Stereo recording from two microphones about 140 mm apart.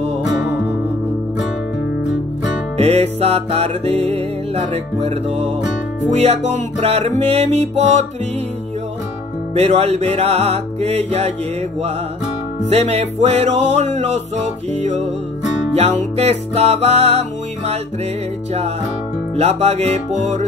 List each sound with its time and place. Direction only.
0.4 s music: 15° right (ahead or behind)
2.8 s music: 50° right (ahead or behind)
9.6 s music: 50° right (ahead or behind)
12.6 s music: 50° right (ahead or behind)
19.3 s music: 50° right (ahead or behind)